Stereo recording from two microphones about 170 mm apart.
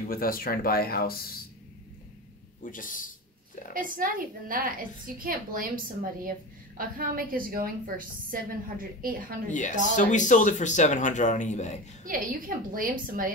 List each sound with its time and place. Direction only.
0.1 s speech: 60° left (ahead or behind)
2.6 s speech: 50° left (ahead or behind)
3.7 s a woman's voice: 55° right (ahead or behind)
6.8 s a woman's voice: 55° right (ahead or behind)
9.5 s speech: 45° left (ahead or behind)
12.0 s a woman's voice: 55° right (ahead or behind)